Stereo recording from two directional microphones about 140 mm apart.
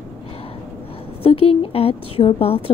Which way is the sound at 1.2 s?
40° left (ahead or behind).